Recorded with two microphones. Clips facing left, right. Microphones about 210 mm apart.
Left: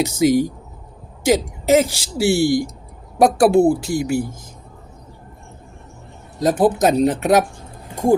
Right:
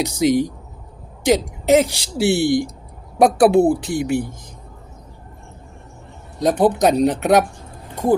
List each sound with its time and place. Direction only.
0.0 s speech: 5° left (ahead or behind)
6.4 s speech: centre (ahead or behind)